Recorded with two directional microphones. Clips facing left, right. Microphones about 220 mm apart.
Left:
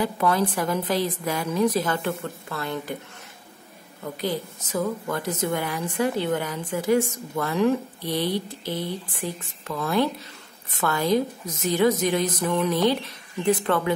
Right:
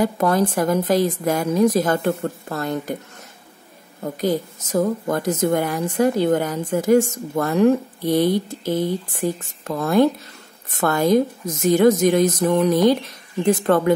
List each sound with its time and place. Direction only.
0.0 s speech: 45° right (ahead or behind)
4.0 s speech: 45° right (ahead or behind)